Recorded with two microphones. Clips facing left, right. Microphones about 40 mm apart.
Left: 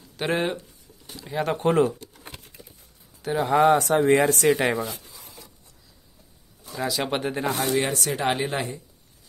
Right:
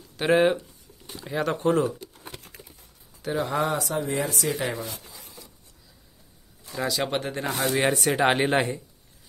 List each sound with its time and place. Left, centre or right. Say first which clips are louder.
0.2 s speech: right 5 dB; centre
1.3 s speech: left 1 dB; centre
1.6 s speech: left 3 dB; left
1.9 s pigeon: left 1 dB; centre
3.2 s a sound: left 2 dB; centre
3.4 s speech: left 11 dB; left
6.7 s speech: even; centre
7.5 s speech: right 1 dB; centre
7.8 s speech: right 3 dB; right